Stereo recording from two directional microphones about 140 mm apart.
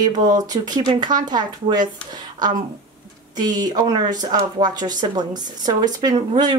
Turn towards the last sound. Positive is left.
turn(degrees=-30)  # may be behind; listen again after turning